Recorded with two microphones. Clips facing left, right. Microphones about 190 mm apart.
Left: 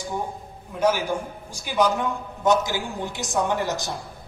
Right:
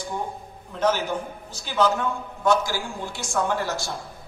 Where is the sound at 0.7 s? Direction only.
10° left (ahead or behind).